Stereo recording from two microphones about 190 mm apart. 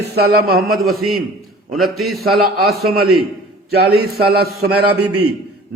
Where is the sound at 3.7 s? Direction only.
55° right (ahead or behind).